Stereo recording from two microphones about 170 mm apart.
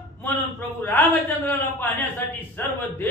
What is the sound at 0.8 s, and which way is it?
Speech, 10° left (ahead or behind).